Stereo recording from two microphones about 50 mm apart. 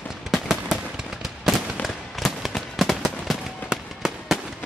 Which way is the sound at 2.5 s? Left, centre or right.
Centre.